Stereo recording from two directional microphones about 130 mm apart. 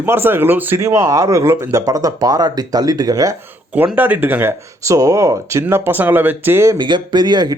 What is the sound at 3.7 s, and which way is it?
Speech, 15° right (ahead or behind).